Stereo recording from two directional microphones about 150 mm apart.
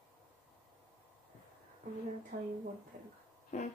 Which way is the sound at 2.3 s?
60° right (ahead or behind).